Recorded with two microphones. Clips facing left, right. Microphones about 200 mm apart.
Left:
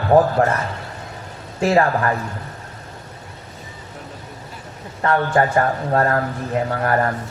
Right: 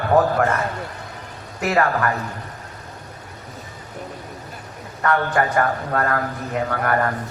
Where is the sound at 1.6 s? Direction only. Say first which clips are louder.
Left 4 dB; 25° left (ahead or behind).